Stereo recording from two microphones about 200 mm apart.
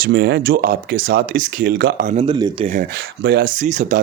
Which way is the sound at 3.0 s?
55° right (ahead or behind).